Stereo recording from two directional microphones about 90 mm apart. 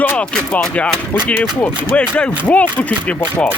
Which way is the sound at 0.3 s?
10° left (ahead or behind).